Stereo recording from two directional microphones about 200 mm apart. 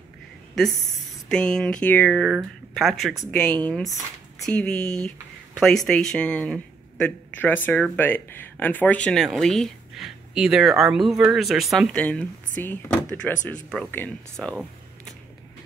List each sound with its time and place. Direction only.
1.3 s speech: 5° left (ahead or behind)